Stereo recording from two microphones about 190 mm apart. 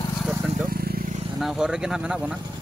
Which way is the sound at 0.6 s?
50° right (ahead or behind).